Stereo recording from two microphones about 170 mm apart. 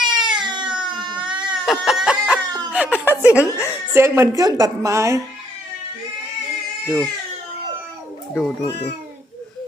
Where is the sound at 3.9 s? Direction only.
15° right (ahead or behind).